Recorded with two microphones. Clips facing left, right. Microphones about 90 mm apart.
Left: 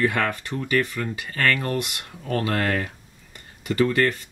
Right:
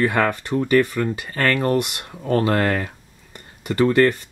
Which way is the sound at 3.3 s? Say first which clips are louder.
Right 2 dB; 30° right (ahead or behind).